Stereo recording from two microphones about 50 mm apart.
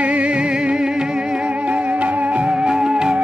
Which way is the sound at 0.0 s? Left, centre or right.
Right.